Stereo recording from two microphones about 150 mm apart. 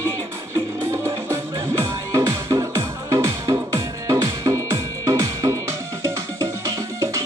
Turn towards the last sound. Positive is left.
turn(degrees=-20)  # may be behind; listen again after turning